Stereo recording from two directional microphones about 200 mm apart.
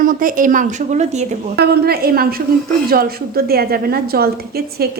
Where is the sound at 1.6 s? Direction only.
50° right (ahead or behind).